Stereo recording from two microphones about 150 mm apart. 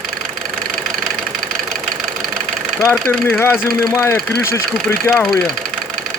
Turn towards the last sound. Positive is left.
turn(degrees=15)  # may be behind; listen again after turning